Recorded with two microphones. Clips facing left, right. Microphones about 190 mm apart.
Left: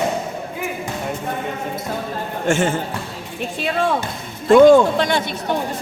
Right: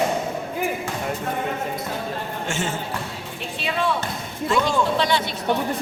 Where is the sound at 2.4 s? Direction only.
50° left (ahead or behind).